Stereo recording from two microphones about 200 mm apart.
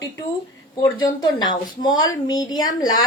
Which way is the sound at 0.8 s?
20° left (ahead or behind).